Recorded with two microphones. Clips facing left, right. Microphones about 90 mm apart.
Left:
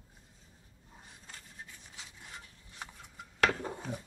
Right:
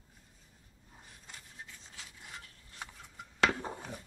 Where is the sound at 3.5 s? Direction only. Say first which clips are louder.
Left 1 dB; 20° right (ahead or behind).